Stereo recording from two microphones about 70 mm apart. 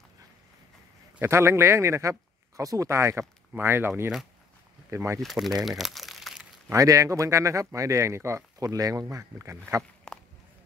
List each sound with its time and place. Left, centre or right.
1.2 s speech: right
4.9 s speech: right
5.2 s speech: centre
5.6 s crumpling: centre
6.7 s speech: right
9.0 s speech: right
10.1 s a sound: centre